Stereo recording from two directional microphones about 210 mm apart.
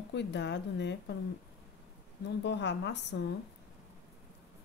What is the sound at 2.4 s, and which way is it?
Speech, 55° left (ahead or behind).